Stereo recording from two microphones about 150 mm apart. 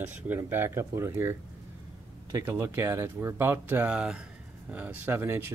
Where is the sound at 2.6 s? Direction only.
20° right (ahead or behind).